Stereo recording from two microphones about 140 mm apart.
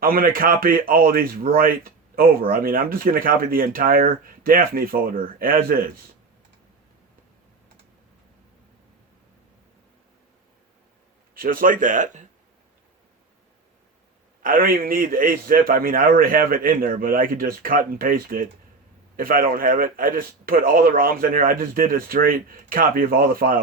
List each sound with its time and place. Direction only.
0.0 s speech: 90° right
11.3 s speech: 85° right; by 12.3 s 65° right (ahead or behind)
14.4 s speech: 85° right